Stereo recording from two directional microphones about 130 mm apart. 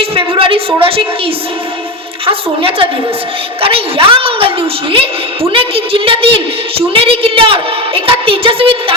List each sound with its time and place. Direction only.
0.0 s a woman's voice: 45° right (ahead or behind)